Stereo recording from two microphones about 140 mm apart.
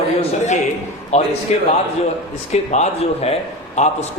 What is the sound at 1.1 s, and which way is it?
Speech, 50° left (ahead or behind).